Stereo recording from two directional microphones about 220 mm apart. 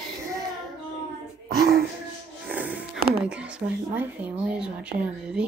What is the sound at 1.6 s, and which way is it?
Music, 45° right (ahead or behind).